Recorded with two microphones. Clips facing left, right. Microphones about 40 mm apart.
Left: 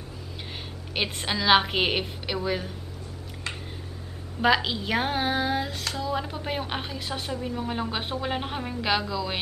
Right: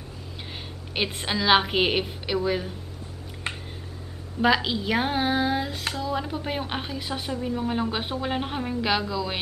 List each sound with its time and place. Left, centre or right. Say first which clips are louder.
0.9 s a woman's voice: right 1 dB; centre
3.4 s a sound: right 2 dB; right
4.4 s a woman's voice: right 1 dB; centre